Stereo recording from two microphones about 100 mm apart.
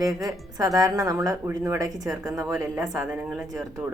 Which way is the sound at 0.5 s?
40° right (ahead or behind).